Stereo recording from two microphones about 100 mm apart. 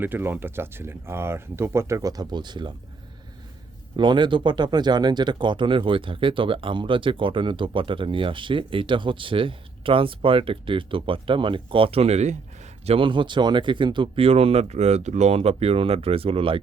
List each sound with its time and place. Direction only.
0.0 s speech: 20° right (ahead or behind); by 2.7 s 50° right (ahead or behind)
3.9 s a man's voice: 50° right (ahead or behind); by 13.1 s 90° right
13.1 s speech: 55° right (ahead or behind); by 16.6 s 70° right (ahead or behind)